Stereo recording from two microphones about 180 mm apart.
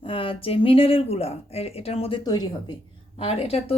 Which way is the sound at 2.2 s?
25° left (ahead or behind).